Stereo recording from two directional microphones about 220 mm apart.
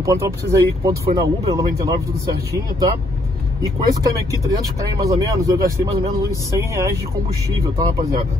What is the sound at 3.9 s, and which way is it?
Speech, 15° right (ahead or behind).